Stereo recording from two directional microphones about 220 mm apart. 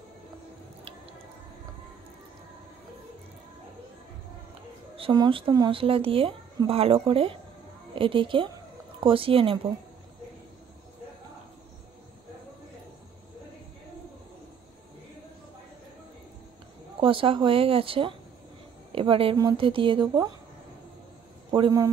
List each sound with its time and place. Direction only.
4.9 s a woman's voice: 20° right (ahead or behind)
17.0 s speech: 25° right (ahead or behind)
21.5 s a man's voice: 20° right (ahead or behind)